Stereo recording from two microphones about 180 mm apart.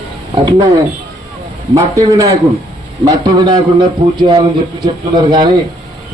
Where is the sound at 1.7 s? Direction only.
20° right (ahead or behind).